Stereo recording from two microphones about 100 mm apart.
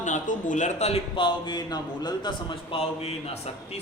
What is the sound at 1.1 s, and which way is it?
A man's voice, 50° left (ahead or behind).